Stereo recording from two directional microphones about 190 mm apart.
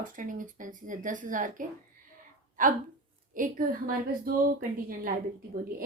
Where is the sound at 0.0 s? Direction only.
45° right (ahead or behind).